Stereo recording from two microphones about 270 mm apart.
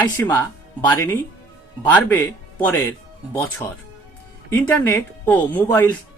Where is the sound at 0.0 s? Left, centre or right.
Centre.